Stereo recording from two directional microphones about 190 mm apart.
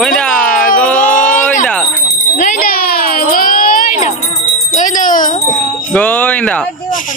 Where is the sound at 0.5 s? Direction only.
45° left (ahead or behind).